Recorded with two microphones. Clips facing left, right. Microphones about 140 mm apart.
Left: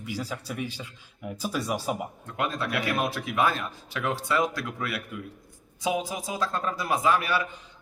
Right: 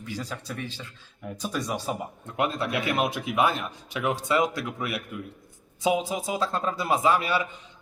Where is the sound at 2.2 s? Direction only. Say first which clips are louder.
Right 3 dB; 25° right (ahead or behind).